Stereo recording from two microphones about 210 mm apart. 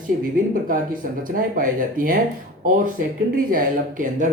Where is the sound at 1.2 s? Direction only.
40° right (ahead or behind).